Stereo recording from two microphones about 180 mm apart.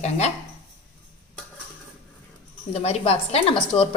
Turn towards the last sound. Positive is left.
turn(degrees=30)  # may be behind; listen again after turning